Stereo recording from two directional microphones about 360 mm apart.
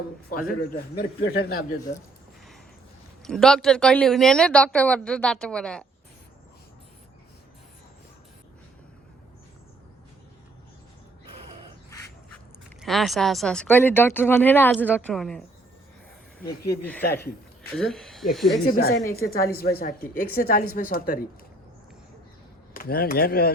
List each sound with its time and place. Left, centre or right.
0.8 s a woman's voice: left
3.2 s speech: centre
12.8 s speech: centre
17.7 s speech: centre
18.6 s a woman's voice: left
22.7 s a woman's voice: left